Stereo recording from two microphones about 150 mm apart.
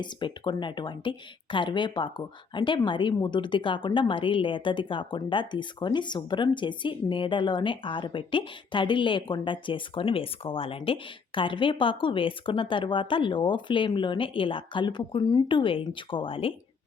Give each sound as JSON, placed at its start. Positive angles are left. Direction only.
{"t": 0.0, "sound": "speech", "side_deg": 30}